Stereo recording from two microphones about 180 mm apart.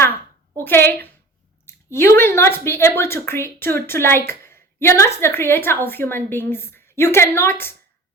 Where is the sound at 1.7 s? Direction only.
15° left (ahead or behind).